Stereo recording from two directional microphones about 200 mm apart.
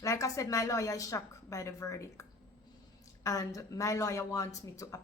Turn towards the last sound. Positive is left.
turn(degrees=15)  # may be behind; listen again after turning